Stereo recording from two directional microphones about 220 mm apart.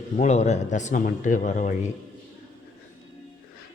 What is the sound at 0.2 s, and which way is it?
A man's voice, 30° left (ahead or behind).